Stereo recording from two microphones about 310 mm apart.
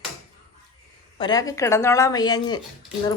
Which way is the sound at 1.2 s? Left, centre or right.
Centre.